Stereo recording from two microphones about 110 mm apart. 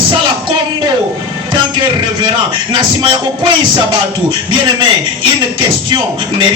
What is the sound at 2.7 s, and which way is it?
Music, 45° right (ahead or behind).